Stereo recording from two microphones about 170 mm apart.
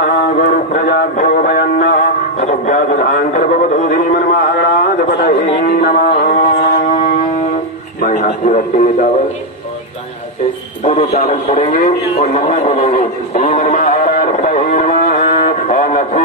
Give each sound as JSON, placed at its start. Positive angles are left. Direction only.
{"t": 0.0, "sound": "music", "side_deg": 60}
{"t": 5.6, "sound": "a sound", "side_deg": 65}
{"t": 8.0, "sound": "radio", "side_deg": 55}
{"t": 11.2, "sound": "a man's voice", "side_deg": 35}
{"t": 11.7, "sound": "a man's voice", "side_deg": 50}
{"t": 13.4, "sound": "a sound", "side_deg": 45}